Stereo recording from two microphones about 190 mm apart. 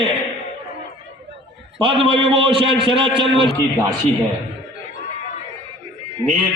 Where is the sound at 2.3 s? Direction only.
25° right (ahead or behind).